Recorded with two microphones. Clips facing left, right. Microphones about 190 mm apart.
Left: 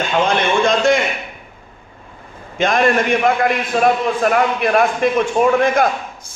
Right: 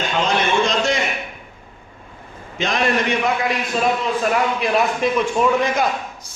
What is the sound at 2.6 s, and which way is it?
A man's voice, 50° left (ahead or behind).